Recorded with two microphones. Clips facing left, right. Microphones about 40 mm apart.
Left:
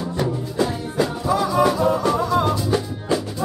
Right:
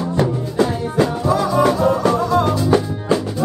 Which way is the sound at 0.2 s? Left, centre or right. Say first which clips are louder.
Right 4 dB; right.